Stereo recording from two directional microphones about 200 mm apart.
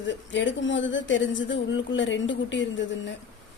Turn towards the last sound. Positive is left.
turn(degrees=65)  # may be behind; listen again after turning